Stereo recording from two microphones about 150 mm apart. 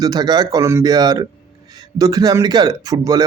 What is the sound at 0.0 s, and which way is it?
Speech, 25° right (ahead or behind).